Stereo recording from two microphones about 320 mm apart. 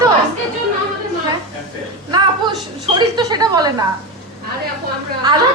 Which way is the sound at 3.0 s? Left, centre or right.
Centre.